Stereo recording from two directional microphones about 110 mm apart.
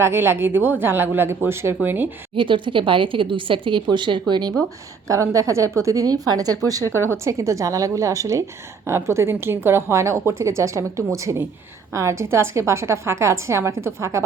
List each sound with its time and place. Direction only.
0.0 s a woman's voice: 20° right (ahead or behind)
2.3 s a woman's voice: 50° right (ahead or behind)
5.0 s a woman's voice: 30° right (ahead or behind)
6.8 s speech: 20° left (ahead or behind)
7.1 s a woman's voice: 30° right (ahead or behind)